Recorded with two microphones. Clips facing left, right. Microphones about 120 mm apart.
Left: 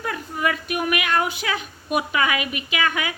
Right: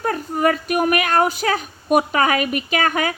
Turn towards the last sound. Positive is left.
turn(degrees=-45)  # may be behind; listen again after turning